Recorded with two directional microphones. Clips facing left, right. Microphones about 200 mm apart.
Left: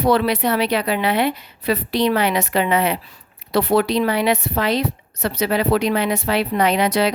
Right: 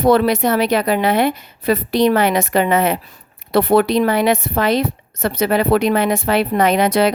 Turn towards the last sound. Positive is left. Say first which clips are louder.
# right 3 dB
turn(degrees=-50)  # may be behind; listen again after turning